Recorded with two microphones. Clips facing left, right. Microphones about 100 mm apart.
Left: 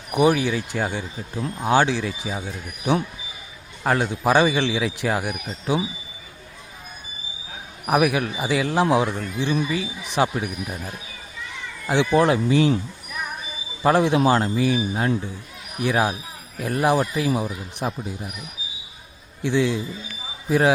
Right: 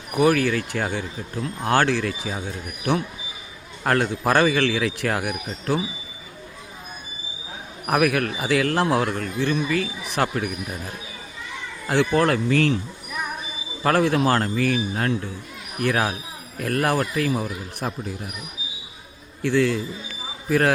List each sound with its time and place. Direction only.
0.2 s speech: 15° left (ahead or behind)
3.8 s speech: 10° left (ahead or behind)
7.9 s speech: 10° left (ahead or behind)
13.8 s speech: 15° left (ahead or behind)
19.4 s speech: 15° left (ahead or behind)